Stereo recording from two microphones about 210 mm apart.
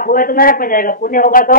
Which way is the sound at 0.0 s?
40° left (ahead or behind).